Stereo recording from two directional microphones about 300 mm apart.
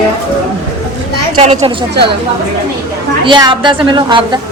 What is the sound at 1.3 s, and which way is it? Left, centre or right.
Speech, right.